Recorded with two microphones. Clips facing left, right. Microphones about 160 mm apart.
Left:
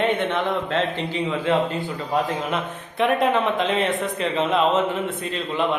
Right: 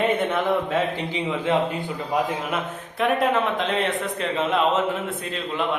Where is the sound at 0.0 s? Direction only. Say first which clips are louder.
Even; 5° right (ahead or behind).